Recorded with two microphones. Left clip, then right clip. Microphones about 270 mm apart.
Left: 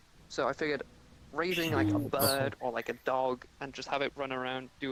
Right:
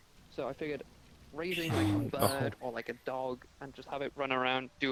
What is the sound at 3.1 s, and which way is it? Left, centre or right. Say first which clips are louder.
Speech: left 7 dB; left.